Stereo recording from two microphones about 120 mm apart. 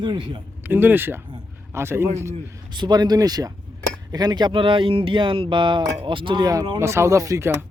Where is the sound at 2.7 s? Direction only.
35° right (ahead or behind).